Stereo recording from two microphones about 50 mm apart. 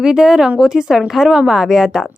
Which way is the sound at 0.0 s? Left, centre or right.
Centre.